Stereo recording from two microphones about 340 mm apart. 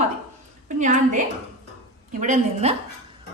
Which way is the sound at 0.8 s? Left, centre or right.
Right.